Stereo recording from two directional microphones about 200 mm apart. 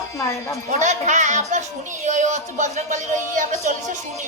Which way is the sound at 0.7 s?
35° right (ahead or behind).